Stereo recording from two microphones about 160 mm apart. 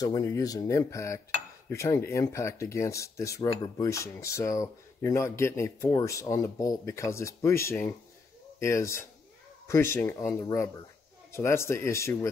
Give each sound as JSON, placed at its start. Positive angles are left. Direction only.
{"t": 0.0, "sound": "speech", "side_deg": 20}